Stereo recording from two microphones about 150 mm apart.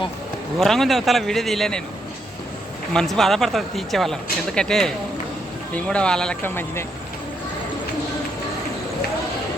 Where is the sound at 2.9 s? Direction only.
5° left (ahead or behind).